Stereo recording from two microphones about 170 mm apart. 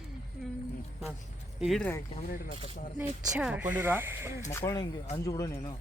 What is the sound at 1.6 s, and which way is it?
Speech, centre (ahead or behind).